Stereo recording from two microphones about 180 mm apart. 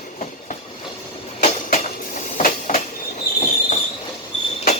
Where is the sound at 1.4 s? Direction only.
55° left (ahead or behind).